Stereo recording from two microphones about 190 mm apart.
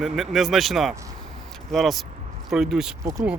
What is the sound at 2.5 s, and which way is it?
Speech, 5° right (ahead or behind).